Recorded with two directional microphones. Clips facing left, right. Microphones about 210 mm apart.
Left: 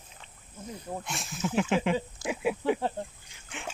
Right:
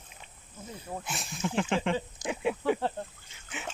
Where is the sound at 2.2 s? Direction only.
15° right (ahead or behind).